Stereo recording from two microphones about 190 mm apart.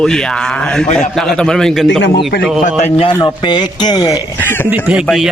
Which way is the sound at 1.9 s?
70° left (ahead or behind).